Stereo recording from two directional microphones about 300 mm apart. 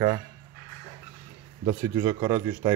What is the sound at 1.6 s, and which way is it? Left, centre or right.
A man's voice, centre.